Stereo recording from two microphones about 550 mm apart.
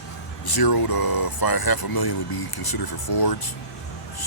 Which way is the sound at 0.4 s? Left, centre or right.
Left.